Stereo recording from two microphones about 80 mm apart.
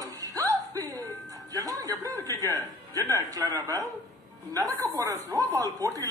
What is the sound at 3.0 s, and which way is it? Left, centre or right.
Speech, right.